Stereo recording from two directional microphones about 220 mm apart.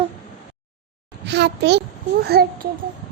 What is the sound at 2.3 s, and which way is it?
Speech, 45° right (ahead or behind).